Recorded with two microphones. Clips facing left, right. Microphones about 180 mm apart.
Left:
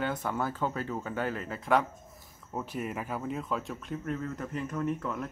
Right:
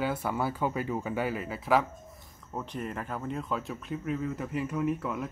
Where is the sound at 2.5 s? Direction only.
5° left (ahead or behind).